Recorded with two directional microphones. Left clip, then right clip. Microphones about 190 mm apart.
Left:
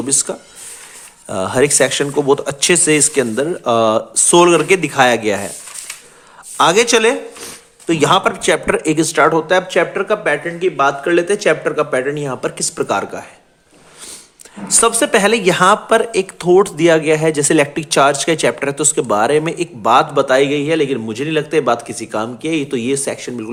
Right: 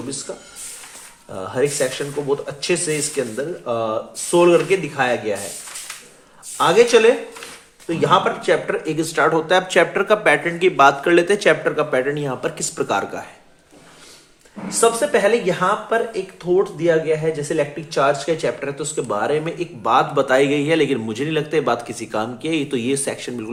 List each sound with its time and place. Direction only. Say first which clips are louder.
0.1 s speech: left 10 dB; 50° left (ahead or behind)
6.6 s speech: left 2 dB; 45° left (ahead or behind); by 13.2 s 20° left (ahead or behind)
14.8 s speech: left 3 dB; 55° left (ahead or behind); by 23.5 s 20° left (ahead or behind)